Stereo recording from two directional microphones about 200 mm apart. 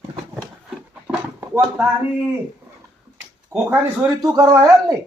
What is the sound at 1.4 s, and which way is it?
Speech, 10° right (ahead or behind).